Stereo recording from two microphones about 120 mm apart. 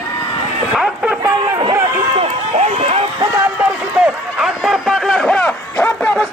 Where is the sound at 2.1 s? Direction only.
60° right (ahead or behind).